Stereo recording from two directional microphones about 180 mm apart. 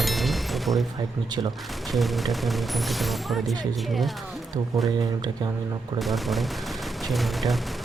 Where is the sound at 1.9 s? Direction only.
Centre (ahead or behind).